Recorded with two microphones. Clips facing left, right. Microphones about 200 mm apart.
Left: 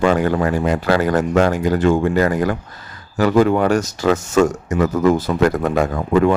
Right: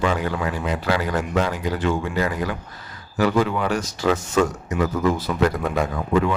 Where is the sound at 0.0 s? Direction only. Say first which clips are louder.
Left 7 dB; 50° left (ahead or behind).